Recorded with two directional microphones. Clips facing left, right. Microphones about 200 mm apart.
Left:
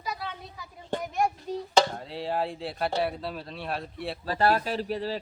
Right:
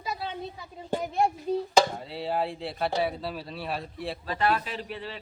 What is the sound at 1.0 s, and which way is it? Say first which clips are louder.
Speech: right 2 dB; 30° right (ahead or behind).